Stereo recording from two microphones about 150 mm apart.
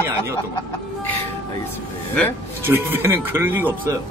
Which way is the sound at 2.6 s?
15° right (ahead or behind).